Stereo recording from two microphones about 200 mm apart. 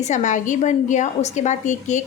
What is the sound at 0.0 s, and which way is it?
A woman's voice, 35° left (ahead or behind).